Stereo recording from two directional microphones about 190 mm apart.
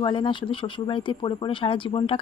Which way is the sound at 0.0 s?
25° left (ahead or behind).